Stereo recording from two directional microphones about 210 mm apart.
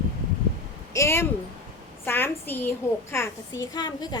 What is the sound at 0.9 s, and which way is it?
A woman's voice, 10° left (ahead or behind).